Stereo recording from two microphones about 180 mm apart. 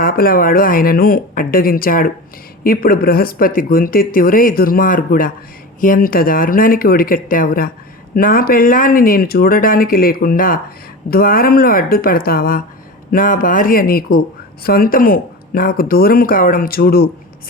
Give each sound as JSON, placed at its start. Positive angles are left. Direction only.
{"t": 0.0, "sound": "speech", "side_deg": 55}